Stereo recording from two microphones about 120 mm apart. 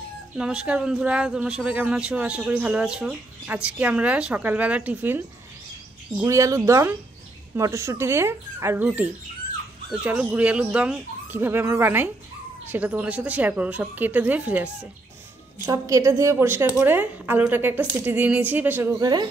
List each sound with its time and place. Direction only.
0.4 s speech: 5° right (ahead or behind)
6.2 s speech: 25° right (ahead or behind)
15.6 s speech: 25° right (ahead or behind)
18.9 s speech: 35° right (ahead or behind)